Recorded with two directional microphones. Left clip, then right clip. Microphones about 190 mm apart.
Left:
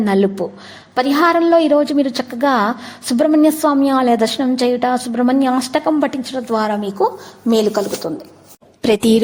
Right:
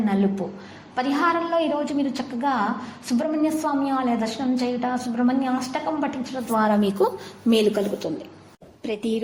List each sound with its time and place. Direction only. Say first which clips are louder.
0.0 s a woman's voice: left 9 dB; 45° left (ahead or behind)
7.5 s speech: left 5 dB; 20° left (ahead or behind)
8.8 s speech: left 13 dB; 70° left (ahead or behind)